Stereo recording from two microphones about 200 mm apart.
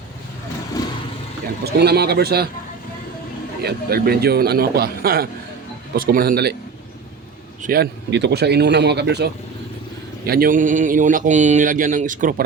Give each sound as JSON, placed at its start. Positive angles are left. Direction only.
{"t": 0.8, "sound": "vehicle", "side_deg": 20}
{"t": 1.6, "sound": "a man's voice", "side_deg": -55}
{"t": 3.6, "sound": "a man's voice", "side_deg": -50}
{"t": 7.6, "sound": "a man's voice", "side_deg": -50}